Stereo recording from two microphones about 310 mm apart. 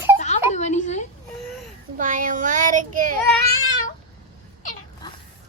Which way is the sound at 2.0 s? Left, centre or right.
Right.